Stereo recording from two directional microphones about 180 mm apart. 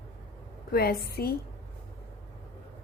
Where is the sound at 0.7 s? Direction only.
60° left (ahead or behind).